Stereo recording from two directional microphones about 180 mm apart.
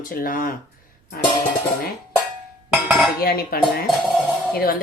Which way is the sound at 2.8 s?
5° right (ahead or behind).